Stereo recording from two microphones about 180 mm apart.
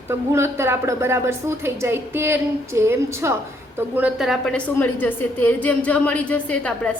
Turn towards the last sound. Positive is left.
turn(degrees=5)  # may be behind; listen again after turning